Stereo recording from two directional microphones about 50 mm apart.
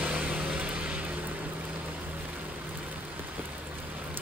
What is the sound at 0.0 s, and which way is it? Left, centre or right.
Vehicle, right.